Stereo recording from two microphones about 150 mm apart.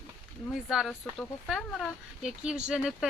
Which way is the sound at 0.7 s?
Centre (ahead or behind).